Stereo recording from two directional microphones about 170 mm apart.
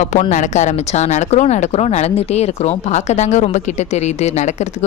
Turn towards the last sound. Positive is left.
turn(degrees=40)  # may be behind; listen again after turning